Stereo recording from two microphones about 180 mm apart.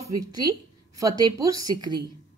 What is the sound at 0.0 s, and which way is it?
A woman's voice, 20° right (ahead or behind).